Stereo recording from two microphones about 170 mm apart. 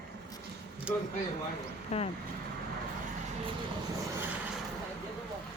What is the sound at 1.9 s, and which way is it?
Speech, 35° left (ahead or behind).